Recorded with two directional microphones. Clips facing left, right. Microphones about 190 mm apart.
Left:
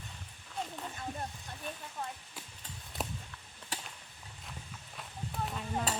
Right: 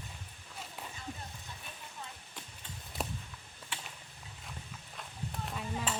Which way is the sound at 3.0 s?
Centre (ahead or behind).